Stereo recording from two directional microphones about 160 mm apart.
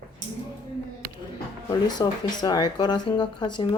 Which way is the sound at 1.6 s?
25° left (ahead or behind).